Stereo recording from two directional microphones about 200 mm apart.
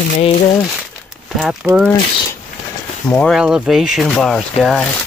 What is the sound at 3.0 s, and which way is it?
Speech, 10° left (ahead or behind).